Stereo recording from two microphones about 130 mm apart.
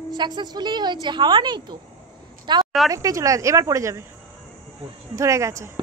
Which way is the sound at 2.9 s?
25° right (ahead or behind).